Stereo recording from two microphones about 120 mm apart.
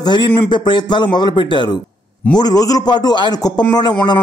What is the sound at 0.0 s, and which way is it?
A man's voice, 40° left (ahead or behind).